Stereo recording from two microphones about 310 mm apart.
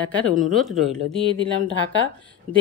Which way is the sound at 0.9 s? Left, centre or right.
Centre.